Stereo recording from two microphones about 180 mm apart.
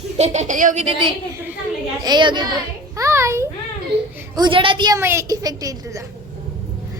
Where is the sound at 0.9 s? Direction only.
30° right (ahead or behind).